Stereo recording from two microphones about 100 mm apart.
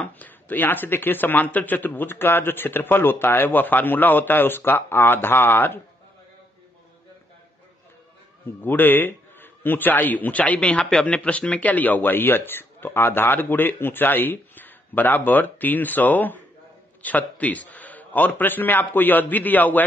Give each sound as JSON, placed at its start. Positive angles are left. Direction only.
{"t": 0.2, "sound": "a man's voice", "side_deg": 20}
{"t": 8.6, "sound": "a man's voice", "side_deg": 20}